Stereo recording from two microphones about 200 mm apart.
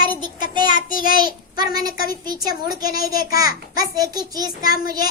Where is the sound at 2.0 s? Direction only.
50° left (ahead or behind).